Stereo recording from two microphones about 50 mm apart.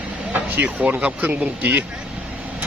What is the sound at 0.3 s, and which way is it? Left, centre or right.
Speech, right.